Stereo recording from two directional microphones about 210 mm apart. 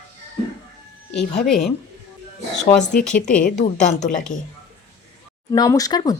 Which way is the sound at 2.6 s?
40° left (ahead or behind).